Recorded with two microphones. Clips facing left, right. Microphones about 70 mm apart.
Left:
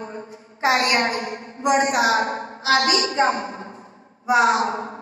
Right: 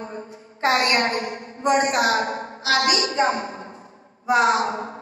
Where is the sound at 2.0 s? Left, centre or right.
Left.